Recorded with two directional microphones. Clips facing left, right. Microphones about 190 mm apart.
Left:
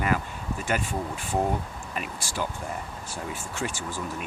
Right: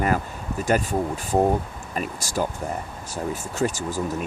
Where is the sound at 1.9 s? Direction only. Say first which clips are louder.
Right 6 dB; 40° right (ahead or behind).